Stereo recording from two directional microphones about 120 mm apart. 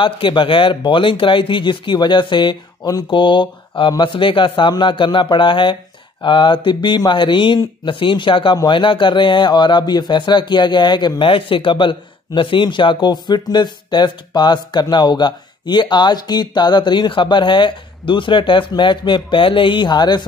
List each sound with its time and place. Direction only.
0.0 s speech: 45° left (ahead or behind)